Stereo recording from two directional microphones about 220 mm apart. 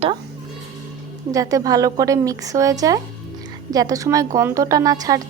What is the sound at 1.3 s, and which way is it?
A woman's voice, 15° right (ahead or behind).